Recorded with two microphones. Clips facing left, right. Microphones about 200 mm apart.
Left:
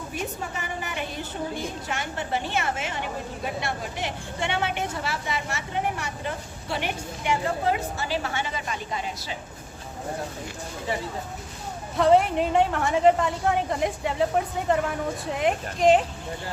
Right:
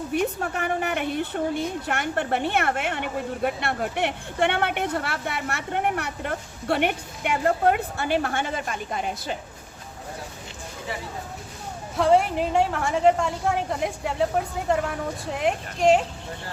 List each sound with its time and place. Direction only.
0.1 s a woman's voice: 60° right (ahead or behind)
11.9 s a woman's voice: centre (ahead or behind)